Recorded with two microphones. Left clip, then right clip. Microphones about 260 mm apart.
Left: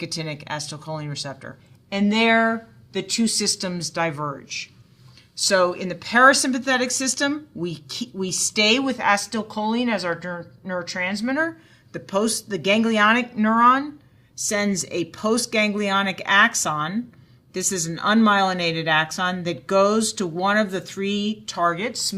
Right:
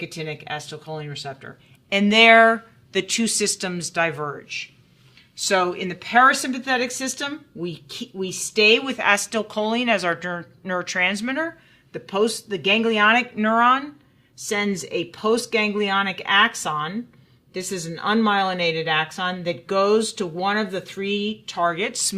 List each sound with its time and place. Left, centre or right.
0.0 s speech: right
1.9 s speech: right
5.5 s speech: right
9.0 s speech: right
11.9 s speech: right
21.8 s speech: right